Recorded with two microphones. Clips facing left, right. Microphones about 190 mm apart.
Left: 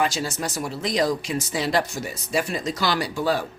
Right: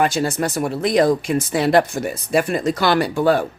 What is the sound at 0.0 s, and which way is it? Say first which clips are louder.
Speech: right 6 dB; 55° right (ahead or behind).